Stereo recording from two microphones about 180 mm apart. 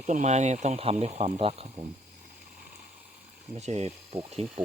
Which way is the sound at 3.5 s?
40° right (ahead or behind).